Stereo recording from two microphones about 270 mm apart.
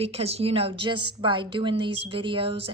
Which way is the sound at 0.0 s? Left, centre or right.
Right.